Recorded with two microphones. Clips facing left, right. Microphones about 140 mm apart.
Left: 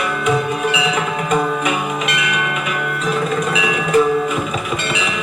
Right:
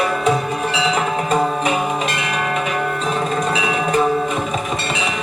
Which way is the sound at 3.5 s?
35° right (ahead or behind).